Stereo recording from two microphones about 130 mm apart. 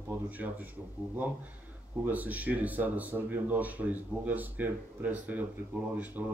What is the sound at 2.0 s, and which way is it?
Speech, 10° right (ahead or behind).